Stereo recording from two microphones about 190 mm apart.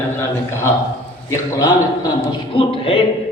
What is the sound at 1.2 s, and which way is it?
Speech, 20° left (ahead or behind).